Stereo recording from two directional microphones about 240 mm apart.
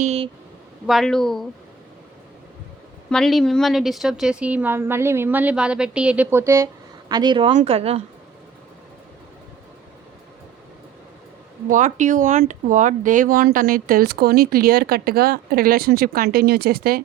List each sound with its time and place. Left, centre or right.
0.0 s a sound: right
0.9 s a woman's voice: centre
3.1 s a woman's voice: centre; by 8.0 s right
11.7 s speech: right